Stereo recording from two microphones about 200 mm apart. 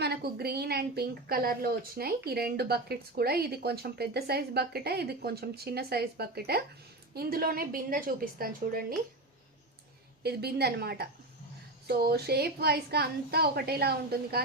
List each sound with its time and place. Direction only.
0.0 s a woman's voice: 55° right (ahead or behind)
10.2 s a woman's voice: 55° right (ahead or behind)